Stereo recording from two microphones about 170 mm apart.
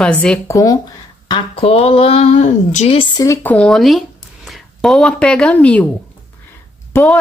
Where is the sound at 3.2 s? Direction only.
10° left (ahead or behind).